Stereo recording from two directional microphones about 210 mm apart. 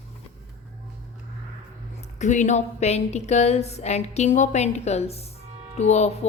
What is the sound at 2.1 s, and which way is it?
A woman's voice, 35° left (ahead or behind).